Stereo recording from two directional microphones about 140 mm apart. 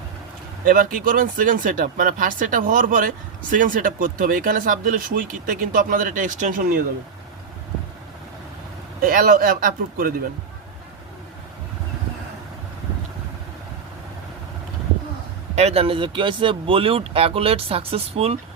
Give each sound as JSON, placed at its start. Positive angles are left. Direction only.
{"t": 0.6, "sound": "speech", "side_deg": -85}
{"t": 9.0, "sound": "speech", "side_deg": -90}
{"t": 15.5, "sound": "speech", "side_deg": -50}